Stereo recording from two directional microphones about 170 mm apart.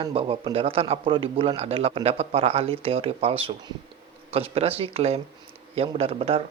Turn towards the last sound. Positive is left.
turn(degrees=-35)  # may be behind; listen again after turning